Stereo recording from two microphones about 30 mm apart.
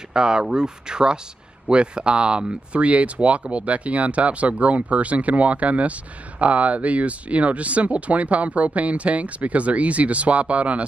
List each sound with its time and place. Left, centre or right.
0.1 s speech: right
2.8 s speech: right